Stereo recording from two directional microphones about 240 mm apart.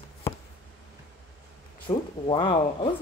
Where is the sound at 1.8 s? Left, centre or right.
Centre.